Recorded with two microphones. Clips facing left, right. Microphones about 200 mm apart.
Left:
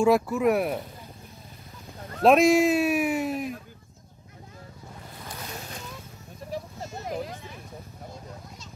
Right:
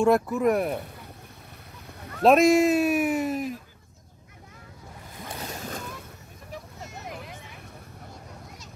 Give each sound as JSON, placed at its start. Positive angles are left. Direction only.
{"t": 0.0, "sound": "a man's voice", "side_deg": 0}
{"t": 2.2, "sound": "a man's voice", "side_deg": 0}
{"t": 6.5, "sound": "a sound", "side_deg": 35}